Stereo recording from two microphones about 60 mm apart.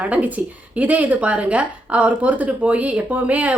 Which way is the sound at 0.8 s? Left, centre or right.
Right.